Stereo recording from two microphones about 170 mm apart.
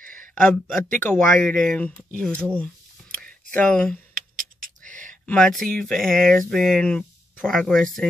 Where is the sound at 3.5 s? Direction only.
5° left (ahead or behind).